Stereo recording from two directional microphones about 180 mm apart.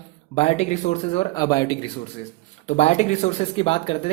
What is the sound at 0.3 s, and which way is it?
Speech, 35° left (ahead or behind).